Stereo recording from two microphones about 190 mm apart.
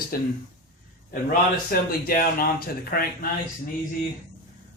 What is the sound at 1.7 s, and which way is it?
Speech, 50° left (ahead or behind).